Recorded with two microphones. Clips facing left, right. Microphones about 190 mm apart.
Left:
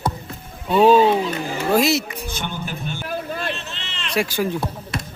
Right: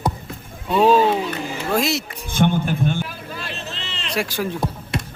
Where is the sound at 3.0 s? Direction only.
45° left (ahead or behind).